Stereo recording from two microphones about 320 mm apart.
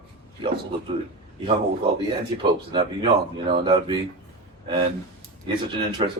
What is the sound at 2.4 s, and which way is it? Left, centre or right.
A man's voice, centre.